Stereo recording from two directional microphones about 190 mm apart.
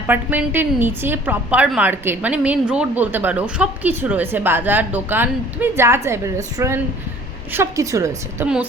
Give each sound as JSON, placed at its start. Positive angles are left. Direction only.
{"t": 0.1, "sound": "a woman's voice", "side_deg": -10}